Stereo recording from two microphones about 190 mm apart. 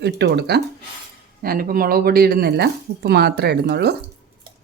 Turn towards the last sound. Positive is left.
turn(degrees=-60)  # may be behind; listen again after turning